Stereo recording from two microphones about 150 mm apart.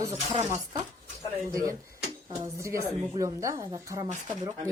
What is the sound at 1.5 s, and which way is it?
Speech, 25° right (ahead or behind).